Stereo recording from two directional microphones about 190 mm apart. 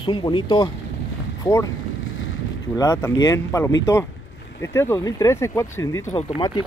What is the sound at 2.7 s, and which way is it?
Speech, 15° left (ahead or behind).